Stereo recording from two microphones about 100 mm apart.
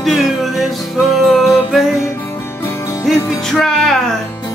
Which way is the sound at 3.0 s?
5° left (ahead or behind).